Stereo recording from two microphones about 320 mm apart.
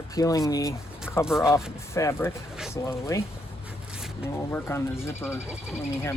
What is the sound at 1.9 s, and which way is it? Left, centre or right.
Speech, centre.